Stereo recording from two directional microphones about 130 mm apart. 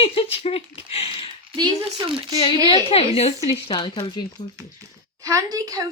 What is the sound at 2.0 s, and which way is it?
Speech, 40° right (ahead or behind).